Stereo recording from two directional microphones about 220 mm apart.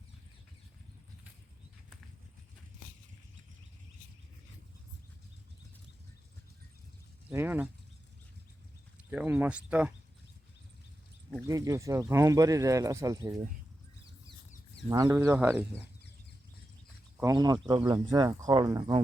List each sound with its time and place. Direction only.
7.3 s speech: 10° right (ahead or behind)
9.0 s speech: 10° right (ahead or behind)
11.4 s speech: 15° right (ahead or behind)
14.8 s speech: 15° right (ahead or behind)
17.2 s speech: 15° right (ahead or behind)